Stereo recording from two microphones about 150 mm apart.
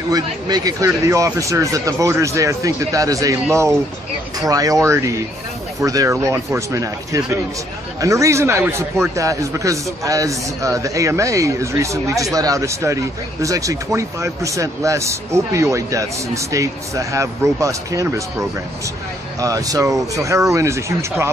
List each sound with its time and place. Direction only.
0.1 s a man's voice: 25° right (ahead or behind)
4.4 s a man's voice: 25° right (ahead or behind)
19.4 s a man's voice: 25° right (ahead or behind)